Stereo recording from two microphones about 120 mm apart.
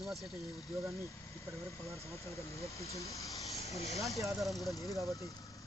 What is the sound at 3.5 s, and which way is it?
Snake, 65° left (ahead or behind).